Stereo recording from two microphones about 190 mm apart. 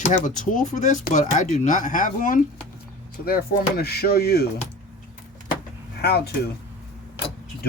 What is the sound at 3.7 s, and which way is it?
Speech, 55° left (ahead or behind).